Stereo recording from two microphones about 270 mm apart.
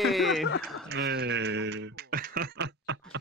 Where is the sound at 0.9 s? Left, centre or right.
Right.